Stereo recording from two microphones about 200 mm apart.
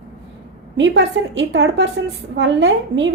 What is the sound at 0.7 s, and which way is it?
A woman's voice, 65° right (ahead or behind).